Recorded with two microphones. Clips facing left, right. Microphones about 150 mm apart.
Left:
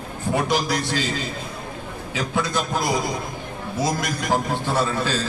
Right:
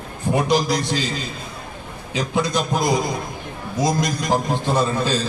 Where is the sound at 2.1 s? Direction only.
20° right (ahead or behind).